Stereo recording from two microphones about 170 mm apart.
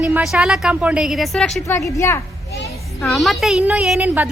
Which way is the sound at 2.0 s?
15° left (ahead or behind).